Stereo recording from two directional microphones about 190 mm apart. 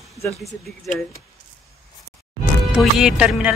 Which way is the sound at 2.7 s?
5° right (ahead or behind).